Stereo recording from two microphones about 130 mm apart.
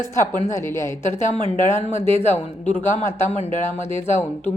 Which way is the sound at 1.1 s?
65° left (ahead or behind).